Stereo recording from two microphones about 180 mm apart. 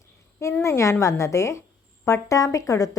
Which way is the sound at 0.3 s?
15° left (ahead or behind).